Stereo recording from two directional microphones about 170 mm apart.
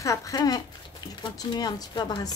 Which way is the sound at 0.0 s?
20° left (ahead or behind).